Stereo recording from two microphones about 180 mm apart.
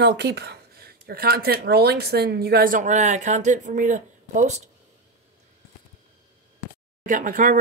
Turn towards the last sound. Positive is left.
turn(degrees=-50)  # may be behind; listen again after turning